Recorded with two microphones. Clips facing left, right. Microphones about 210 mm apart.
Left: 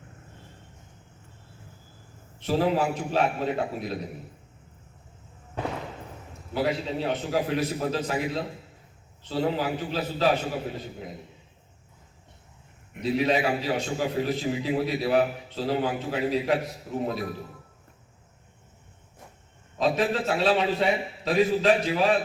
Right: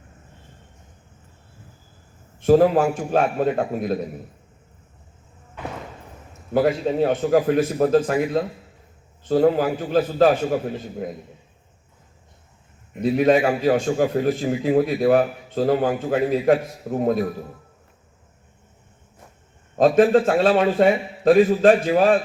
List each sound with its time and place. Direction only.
2.4 s a man's voice: 50° right (ahead or behind)
6.5 s a man's voice: 50° right (ahead or behind)
13.0 s a man's voice: 50° right (ahead or behind)
19.7 s a man's voice: 50° right (ahead or behind)